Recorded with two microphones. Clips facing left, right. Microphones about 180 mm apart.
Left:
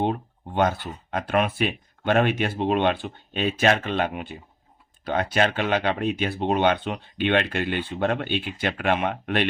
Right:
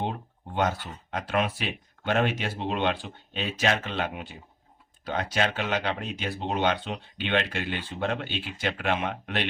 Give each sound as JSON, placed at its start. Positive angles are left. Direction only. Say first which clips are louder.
{"t": 0.0, "sound": "speech", "louder": "left 7 dB", "side_deg": 60}